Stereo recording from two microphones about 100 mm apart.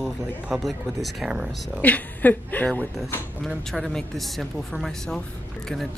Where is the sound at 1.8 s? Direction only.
15° left (ahead or behind).